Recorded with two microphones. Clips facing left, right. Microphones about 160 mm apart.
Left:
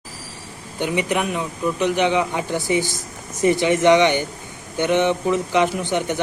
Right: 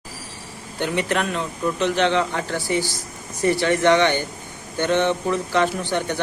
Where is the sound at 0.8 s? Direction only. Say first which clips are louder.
Left 1 dB; 15° left (ahead or behind).